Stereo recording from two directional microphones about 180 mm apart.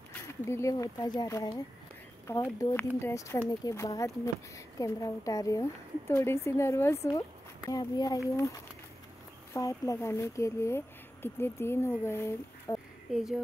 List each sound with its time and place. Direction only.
0.5 s a woman's voice: 15° left (ahead or behind)
9.5 s a woman's voice: 20° left (ahead or behind)
13.1 s speech: 5° right (ahead or behind)